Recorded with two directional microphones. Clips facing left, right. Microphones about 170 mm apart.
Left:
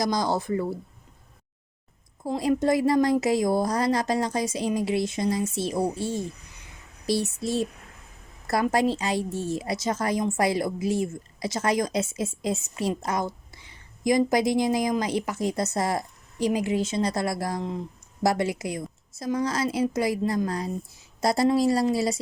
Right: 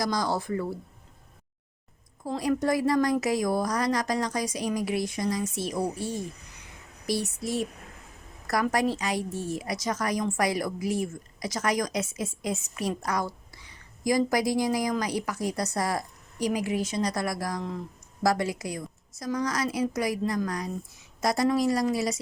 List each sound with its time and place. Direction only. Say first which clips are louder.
0.0 s a woman's voice: left 3 dB; 20° left (ahead or behind)
2.2 s a woman's voice: left 3 dB; 25° left (ahead or behind)